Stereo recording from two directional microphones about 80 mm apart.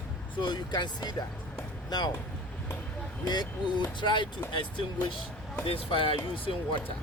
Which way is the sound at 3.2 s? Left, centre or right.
Left.